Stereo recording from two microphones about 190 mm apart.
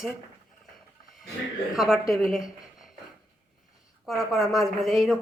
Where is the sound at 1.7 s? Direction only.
Centre (ahead or behind).